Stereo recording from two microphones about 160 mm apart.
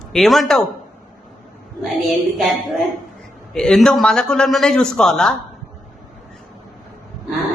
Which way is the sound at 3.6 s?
5° left (ahead or behind).